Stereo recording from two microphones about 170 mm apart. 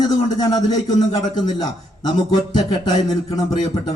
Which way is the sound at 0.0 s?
20° left (ahead or behind).